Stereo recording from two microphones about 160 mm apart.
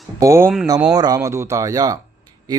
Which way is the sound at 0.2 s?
15° right (ahead or behind).